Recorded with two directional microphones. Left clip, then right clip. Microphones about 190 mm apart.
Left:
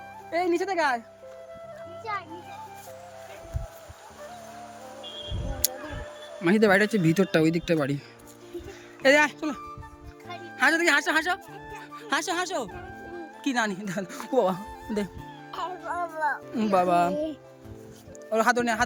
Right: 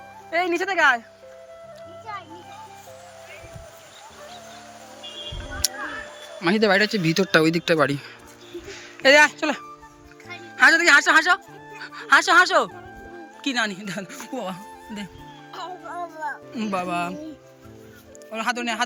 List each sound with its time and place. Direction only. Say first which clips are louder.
0.3 s speech: right 3 dB; 10° left (ahead or behind)
5.6 s music: right 5 dB; 10° left (ahead or behind)
6.4 s speech: right 2 dB; 15° left (ahead or behind)
7.3 s speech: right 5 dB; 10° left (ahead or behind)
9.4 s speech: right 7 dB; centre (ahead or behind)
10.4 s speech: right 7 dB; 10° left (ahead or behind)
11.8 s music: right 11 dB; 5° left (ahead or behind)
13.4 s speech: right 3 dB; 20° left (ahead or behind)
15.9 s music: left 4 dB; 30° left (ahead or behind)
18.3 s speech: left 3 dB; 30° left (ahead or behind)